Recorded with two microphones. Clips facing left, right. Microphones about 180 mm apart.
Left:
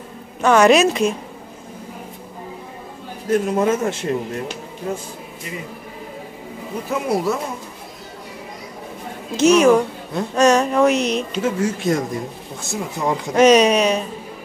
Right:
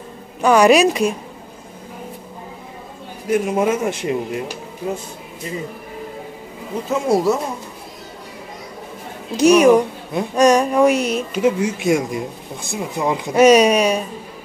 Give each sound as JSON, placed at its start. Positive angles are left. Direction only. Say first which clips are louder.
{"t": 0.4, "sound": "a woman's voice", "louder": "right 1 dB", "side_deg": -10}
{"t": 3.3, "sound": "a woman's voice", "louder": "even", "side_deg": -10}
{"t": 6.9, "sound": "speech", "louder": "right 4 dB", "side_deg": -25}
{"t": 9.4, "sound": "a woman's voice", "louder": "right 2 dB", "side_deg": -10}